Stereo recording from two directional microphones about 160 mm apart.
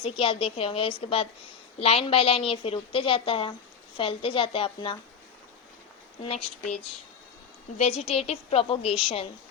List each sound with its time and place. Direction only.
0.0 s a woman's voice: 35° left (ahead or behind)
6.2 s a woman's voice: 40° left (ahead or behind)
7.8 s a woman's voice: 40° left (ahead or behind)